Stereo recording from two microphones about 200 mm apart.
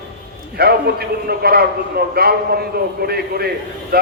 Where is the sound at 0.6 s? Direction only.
50° right (ahead or behind).